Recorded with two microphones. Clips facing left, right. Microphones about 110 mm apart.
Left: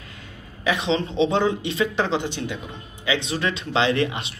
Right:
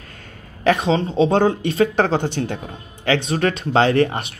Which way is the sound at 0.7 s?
45° right (ahead or behind).